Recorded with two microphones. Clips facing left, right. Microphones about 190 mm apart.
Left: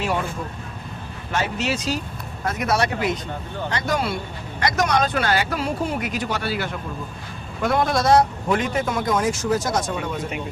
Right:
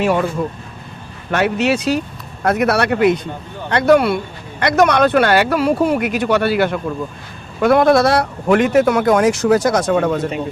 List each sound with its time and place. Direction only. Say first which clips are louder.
0.0 s speech: right 8 dB; 65° right (ahead or behind)
1.3 s speech: right 8 dB; 65° right (ahead or behind)